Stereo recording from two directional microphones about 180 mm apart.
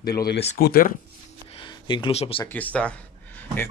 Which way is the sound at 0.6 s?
55° left (ahead or behind).